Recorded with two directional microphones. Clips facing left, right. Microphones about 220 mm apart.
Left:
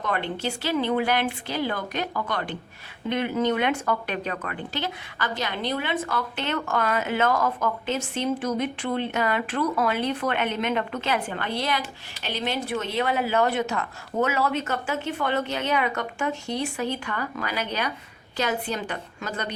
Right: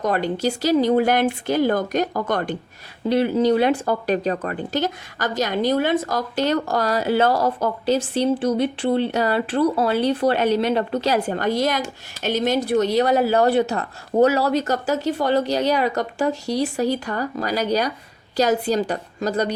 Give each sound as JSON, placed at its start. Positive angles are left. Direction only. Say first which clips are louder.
{"t": 0.0, "sound": "speech", "louder": "right 7 dB", "side_deg": -40}
{"t": 3.1, "sound": "speech", "louder": "right 7 dB", "side_deg": -35}